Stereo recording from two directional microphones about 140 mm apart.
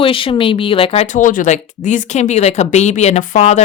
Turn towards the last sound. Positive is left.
turn(degrees=55)  # may be behind; listen again after turning